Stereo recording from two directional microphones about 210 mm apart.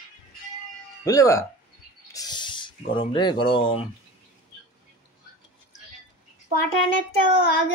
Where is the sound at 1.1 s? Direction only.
15° left (ahead or behind).